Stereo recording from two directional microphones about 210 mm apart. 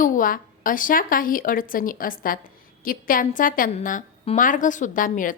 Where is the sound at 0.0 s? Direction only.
40° left (ahead or behind).